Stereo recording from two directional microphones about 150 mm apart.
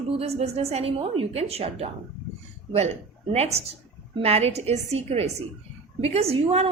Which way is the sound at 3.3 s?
45° right (ahead or behind).